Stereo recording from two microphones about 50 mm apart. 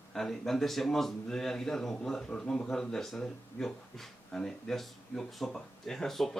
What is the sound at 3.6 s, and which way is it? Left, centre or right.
A man's voice, centre.